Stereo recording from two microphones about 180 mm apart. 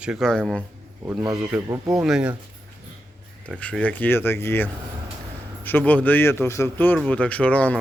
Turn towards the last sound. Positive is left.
turn(degrees=5)  # may be behind; listen again after turning